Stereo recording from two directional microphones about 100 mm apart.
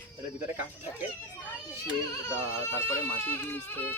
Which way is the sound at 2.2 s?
25° left (ahead or behind).